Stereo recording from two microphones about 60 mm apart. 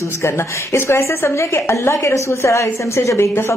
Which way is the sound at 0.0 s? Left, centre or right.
Left.